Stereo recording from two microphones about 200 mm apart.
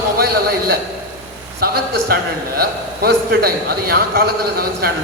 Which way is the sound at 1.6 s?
50° right (ahead or behind).